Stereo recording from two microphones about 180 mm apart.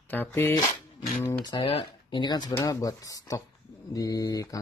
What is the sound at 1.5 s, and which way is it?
Speech, 25° left (ahead or behind).